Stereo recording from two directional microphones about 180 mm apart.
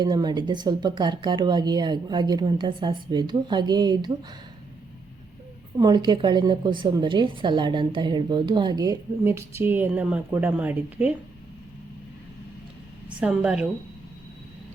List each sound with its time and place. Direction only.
0.0 s a woman's voice: 25° right (ahead or behind)
5.7 s a woman's voice: 25° right (ahead or behind); by 11.1 s 10° right (ahead or behind)
13.1 s a woman's voice: 5° right (ahead or behind)